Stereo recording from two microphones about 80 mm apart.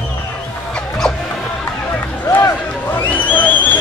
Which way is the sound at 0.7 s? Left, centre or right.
Centre.